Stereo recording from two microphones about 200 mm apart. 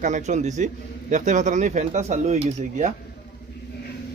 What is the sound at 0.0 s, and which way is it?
A man's voice, 35° right (ahead or behind).